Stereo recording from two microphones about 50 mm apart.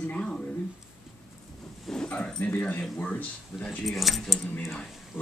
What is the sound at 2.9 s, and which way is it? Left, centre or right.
Speech, left.